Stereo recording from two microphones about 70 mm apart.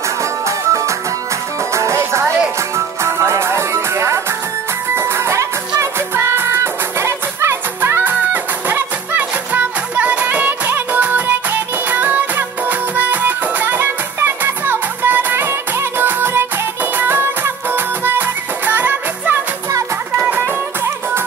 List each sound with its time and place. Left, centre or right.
0.2 s music: right